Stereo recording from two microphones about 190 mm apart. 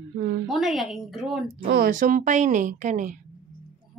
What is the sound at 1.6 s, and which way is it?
A woman's voice, 50° right (ahead or behind).